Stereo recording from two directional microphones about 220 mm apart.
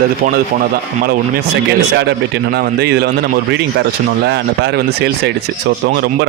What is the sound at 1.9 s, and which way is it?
Speech, 50° right (ahead or behind).